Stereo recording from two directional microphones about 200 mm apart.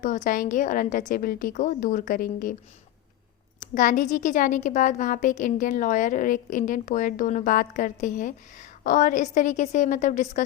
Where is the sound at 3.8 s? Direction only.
40° left (ahead or behind).